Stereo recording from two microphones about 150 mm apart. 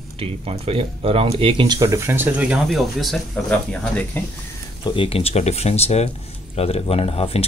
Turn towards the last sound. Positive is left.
turn(degrees=40)  # may be behind; listen again after turning